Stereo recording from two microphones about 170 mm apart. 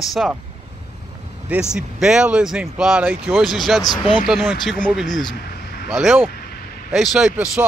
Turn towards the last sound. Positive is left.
turn(degrees=-5)  # may be behind; listen again after turning